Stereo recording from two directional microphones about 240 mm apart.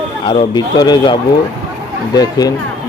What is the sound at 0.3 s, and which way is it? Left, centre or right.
Speech, centre.